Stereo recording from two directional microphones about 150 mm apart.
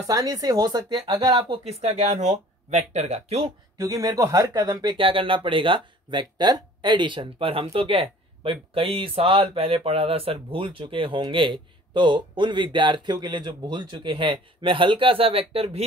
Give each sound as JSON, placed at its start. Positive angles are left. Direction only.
{"t": 0.0, "sound": "speech", "side_deg": -25}
{"t": 1.6, "sound": "speech", "side_deg": -45}
{"t": 3.7, "sound": "speech", "side_deg": -20}